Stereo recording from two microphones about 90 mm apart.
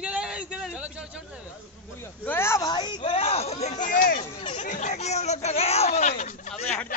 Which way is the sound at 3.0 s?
90° left.